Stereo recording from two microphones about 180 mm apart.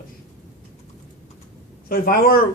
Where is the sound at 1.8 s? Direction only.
55° left (ahead or behind).